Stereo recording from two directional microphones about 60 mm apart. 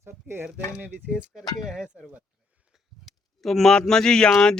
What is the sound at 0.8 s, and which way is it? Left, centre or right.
Speech, right.